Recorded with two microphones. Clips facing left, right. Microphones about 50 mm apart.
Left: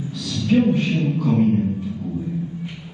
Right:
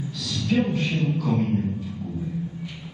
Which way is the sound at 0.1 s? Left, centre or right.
Left.